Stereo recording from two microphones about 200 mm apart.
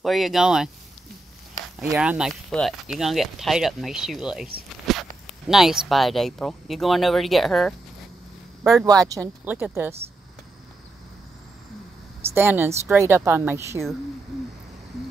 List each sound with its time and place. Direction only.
0.0 s speech: centre (ahead or behind)
1.8 s speech: 10° right (ahead or behind)
8.8 s a woman's voice: 15° right (ahead or behind)
12.4 s a woman's voice: 10° right (ahead or behind)